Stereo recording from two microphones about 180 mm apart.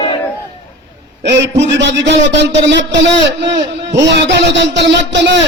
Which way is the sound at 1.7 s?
75° right (ahead or behind).